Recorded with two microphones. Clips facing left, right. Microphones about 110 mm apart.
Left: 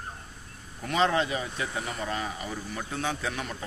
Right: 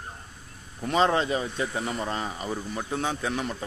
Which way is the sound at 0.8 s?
30° right (ahead or behind).